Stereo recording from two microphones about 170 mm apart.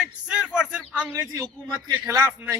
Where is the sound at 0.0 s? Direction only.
5° right (ahead or behind).